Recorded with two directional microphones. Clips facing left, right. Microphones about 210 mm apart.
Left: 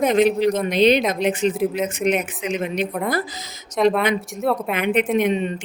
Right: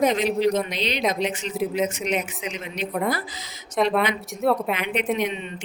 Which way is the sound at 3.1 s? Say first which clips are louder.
Left 4 dB; 40° left (ahead or behind).